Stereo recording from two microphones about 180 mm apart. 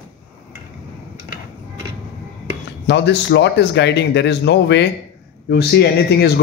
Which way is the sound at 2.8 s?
75° left (ahead or behind).